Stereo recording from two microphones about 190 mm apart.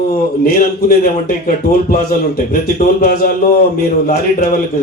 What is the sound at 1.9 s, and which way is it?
A man's voice, 45° left (ahead or behind).